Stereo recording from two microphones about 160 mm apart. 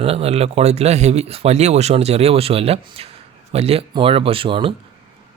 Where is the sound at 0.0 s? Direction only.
40° right (ahead or behind).